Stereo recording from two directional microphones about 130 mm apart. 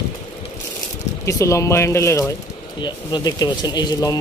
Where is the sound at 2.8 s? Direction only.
35° left (ahead or behind).